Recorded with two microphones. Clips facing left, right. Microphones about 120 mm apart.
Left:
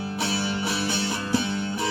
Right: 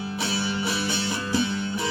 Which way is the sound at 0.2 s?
50° left (ahead or behind).